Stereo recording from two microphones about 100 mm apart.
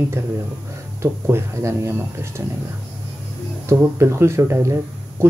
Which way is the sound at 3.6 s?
25° right (ahead or behind).